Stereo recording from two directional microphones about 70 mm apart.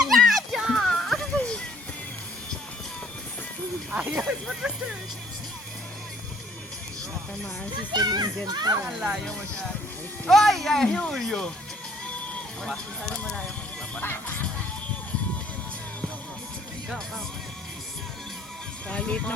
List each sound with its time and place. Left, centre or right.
0.0 s music: centre
3.9 s a sound: centre
7.8 s a child's voice: right
8.9 s speech: centre
10.2 s speech: centre
10.8 s speech: centre
11.1 s speech: centre
12.6 s speech: centre
14.0 s music: left
18.9 s speech: centre